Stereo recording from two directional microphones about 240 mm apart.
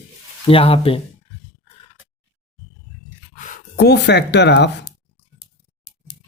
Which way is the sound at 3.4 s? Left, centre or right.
Left.